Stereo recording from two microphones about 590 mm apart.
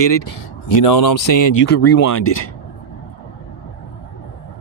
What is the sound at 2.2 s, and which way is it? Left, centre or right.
Speech, left.